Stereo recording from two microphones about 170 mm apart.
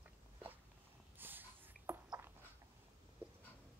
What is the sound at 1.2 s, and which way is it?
Snort, 10° right (ahead or behind).